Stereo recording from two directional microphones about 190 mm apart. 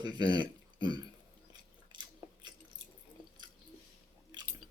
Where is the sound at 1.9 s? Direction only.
25° right (ahead or behind).